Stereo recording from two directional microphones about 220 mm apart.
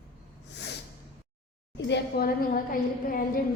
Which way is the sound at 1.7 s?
50° left (ahead or behind).